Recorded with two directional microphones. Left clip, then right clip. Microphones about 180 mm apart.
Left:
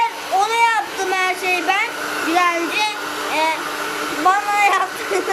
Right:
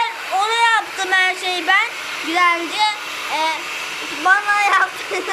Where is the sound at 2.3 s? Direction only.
15° left (ahead or behind).